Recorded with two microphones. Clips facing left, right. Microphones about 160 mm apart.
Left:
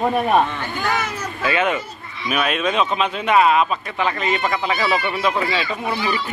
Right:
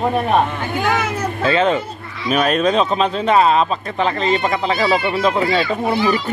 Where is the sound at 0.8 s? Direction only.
55° right (ahead or behind).